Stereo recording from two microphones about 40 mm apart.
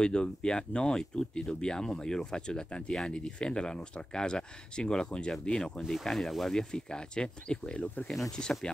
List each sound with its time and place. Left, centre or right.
0.0 s speech: left
6.0 s speech: centre